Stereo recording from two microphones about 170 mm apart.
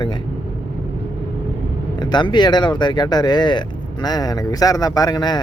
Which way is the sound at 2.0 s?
25° left (ahead or behind).